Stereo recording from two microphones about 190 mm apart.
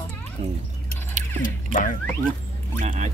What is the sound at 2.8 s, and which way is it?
Speech, 40° right (ahead or behind).